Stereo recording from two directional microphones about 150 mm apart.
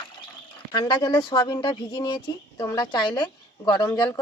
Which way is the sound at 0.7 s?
30° left (ahead or behind).